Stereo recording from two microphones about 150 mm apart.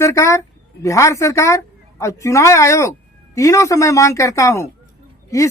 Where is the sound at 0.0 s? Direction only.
20° left (ahead or behind).